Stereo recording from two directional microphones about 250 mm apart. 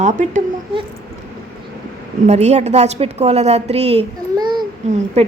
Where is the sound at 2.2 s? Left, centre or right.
Right.